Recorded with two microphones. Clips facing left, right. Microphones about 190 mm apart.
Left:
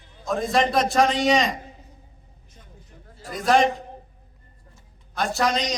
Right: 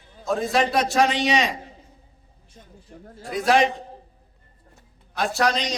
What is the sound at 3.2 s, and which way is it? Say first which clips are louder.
Speech: even; centre (ahead or behind).